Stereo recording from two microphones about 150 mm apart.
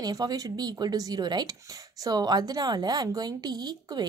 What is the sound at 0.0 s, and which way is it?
Speech, 25° right (ahead or behind).